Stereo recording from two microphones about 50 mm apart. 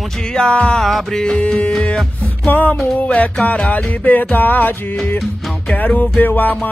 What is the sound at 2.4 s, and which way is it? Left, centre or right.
Music, left.